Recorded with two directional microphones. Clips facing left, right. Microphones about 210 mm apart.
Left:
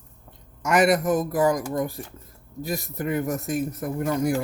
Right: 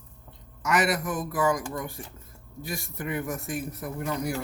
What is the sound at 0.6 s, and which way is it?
Speech, 45° left (ahead or behind).